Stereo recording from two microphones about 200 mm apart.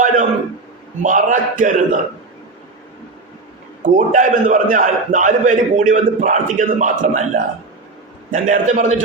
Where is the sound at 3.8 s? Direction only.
40° right (ahead or behind).